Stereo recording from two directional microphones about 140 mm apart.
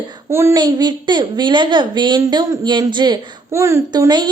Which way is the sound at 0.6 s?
30° right (ahead or behind).